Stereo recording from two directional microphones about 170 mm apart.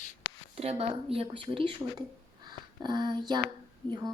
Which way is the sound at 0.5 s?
35° right (ahead or behind).